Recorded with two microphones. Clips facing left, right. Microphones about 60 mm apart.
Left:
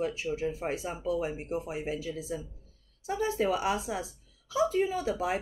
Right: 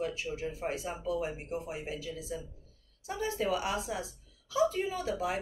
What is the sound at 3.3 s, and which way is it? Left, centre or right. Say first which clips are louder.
Speech: left 2 dB; left.